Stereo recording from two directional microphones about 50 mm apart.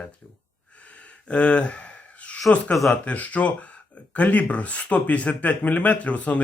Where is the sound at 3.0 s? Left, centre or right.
Left.